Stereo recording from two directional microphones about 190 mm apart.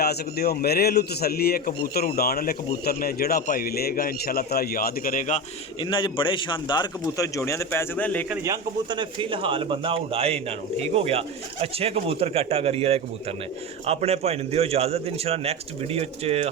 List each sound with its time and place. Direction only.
0.0 s a man's voice: 55° left (ahead or behind)
5.8 s a man's voice: 25° left (ahead or behind); by 8.2 s 10° left (ahead or behind)
8.4 s a man's voice: 25° right (ahead or behind)